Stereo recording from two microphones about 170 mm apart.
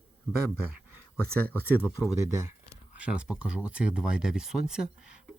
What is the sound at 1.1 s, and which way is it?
Speech, 10° left (ahead or behind).